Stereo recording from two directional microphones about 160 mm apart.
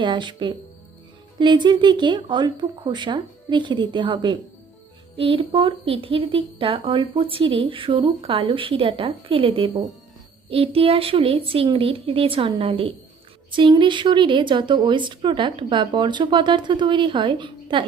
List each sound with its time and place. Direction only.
0.0 s a woman's voice: 30° right (ahead or behind)